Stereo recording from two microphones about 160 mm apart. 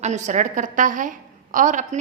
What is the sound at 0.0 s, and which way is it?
A woman's voice, 45° right (ahead or behind).